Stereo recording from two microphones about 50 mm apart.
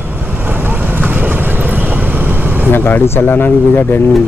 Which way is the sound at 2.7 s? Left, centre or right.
Left.